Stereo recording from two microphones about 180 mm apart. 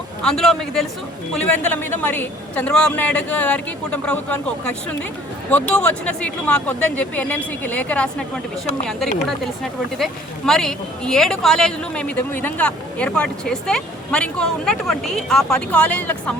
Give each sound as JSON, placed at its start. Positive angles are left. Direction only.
{"t": 0.2, "sound": "a man's voice", "side_deg": 5}
{"t": 10.0, "sound": "speech", "side_deg": 5}